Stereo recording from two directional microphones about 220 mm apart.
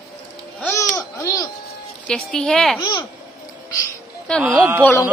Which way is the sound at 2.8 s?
20° left (ahead or behind).